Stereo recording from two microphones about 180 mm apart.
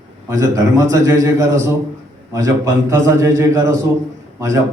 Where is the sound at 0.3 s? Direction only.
20° right (ahead or behind).